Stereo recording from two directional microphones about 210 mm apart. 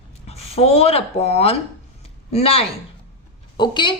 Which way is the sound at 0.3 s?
30° left (ahead or behind).